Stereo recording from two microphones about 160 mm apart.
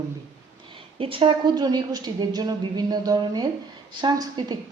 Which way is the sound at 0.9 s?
35° right (ahead or behind).